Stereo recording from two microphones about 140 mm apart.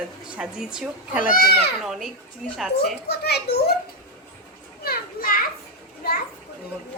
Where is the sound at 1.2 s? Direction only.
85° left.